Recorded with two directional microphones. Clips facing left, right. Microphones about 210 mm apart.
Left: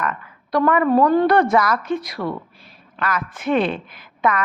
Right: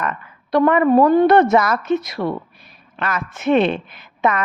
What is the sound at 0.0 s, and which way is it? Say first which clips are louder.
A woman's voice: right 1 dB; 25° right (ahead or behind).